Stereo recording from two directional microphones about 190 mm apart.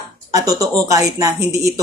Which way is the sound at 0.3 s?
20° right (ahead or behind).